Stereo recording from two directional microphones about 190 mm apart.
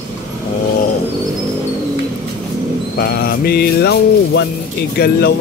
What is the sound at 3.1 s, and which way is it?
Music, 55° left (ahead or behind).